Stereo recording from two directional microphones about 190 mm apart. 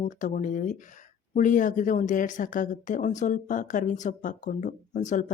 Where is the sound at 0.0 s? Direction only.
40° left (ahead or behind).